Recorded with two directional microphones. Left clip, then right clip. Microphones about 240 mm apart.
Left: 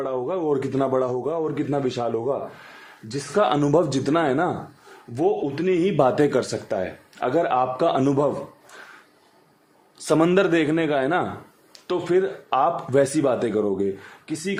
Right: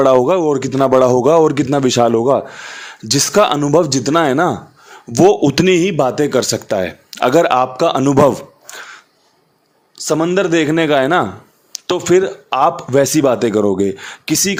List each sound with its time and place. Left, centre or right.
0.0 s speech: right
3.4 s speech: right
5.1 s speech: right
6.0 s speech: centre; by 8.7 s right
10.1 s speech: centre